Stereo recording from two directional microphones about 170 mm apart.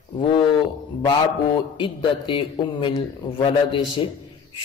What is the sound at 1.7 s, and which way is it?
A man's voice, 30° left (ahead or behind).